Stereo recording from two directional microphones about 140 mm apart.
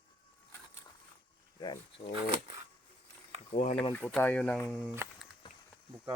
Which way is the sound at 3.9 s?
10° left (ahead or behind).